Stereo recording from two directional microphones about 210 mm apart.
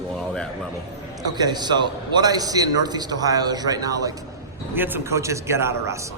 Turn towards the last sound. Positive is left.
turn(degrees=-10)  # may be behind; listen again after turning